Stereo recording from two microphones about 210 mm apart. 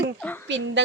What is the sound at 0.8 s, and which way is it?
Speech, 55° right (ahead or behind).